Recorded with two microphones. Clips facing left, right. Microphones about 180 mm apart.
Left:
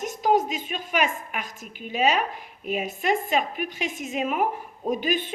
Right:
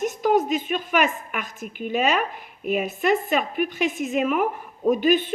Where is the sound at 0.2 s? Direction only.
50° right (ahead or behind).